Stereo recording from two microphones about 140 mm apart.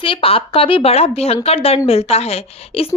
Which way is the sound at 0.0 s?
40° left (ahead or behind).